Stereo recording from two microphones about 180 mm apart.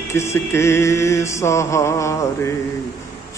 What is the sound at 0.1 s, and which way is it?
Mantra, 15° left (ahead or behind).